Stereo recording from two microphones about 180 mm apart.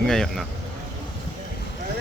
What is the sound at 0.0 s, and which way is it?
Speech, 5° left (ahead or behind).